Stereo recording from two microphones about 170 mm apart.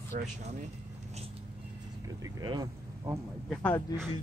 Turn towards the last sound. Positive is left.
turn(degrees=5)  # may be behind; listen again after turning